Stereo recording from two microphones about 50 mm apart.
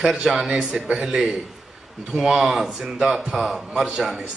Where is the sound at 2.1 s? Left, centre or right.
Centre.